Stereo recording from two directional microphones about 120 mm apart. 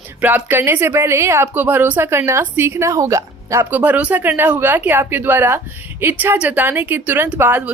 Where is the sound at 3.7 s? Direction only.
10° right (ahead or behind).